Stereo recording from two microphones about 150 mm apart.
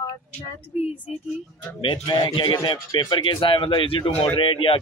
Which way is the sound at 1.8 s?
35° left (ahead or behind).